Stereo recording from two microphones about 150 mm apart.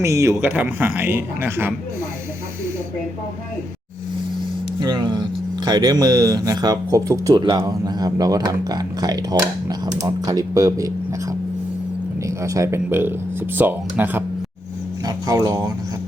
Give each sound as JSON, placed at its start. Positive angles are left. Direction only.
{"t": 0.0, "sound": "speech", "side_deg": -20}
{"t": 4.8, "sound": "speech", "side_deg": -30}
{"t": 12.4, "sound": "speech", "side_deg": -20}
{"t": 15.0, "sound": "speech", "side_deg": -25}